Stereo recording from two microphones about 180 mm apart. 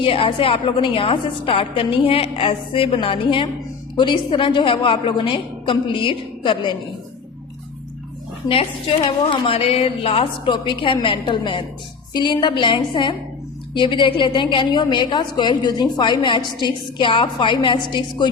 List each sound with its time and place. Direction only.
0.0 s a woman's voice: 30° left (ahead or behind)
8.4 s a woman's voice: 30° left (ahead or behind)